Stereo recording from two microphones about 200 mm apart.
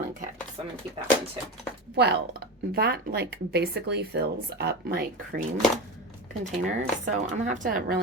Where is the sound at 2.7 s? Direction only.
50° right (ahead or behind).